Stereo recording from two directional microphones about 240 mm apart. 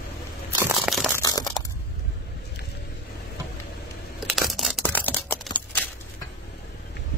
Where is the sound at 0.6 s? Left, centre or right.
Centre.